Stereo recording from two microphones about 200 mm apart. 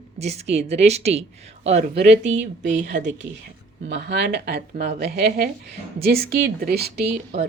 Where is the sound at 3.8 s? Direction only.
60° right (ahead or behind).